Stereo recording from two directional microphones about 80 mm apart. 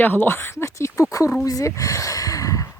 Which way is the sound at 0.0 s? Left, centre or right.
Left.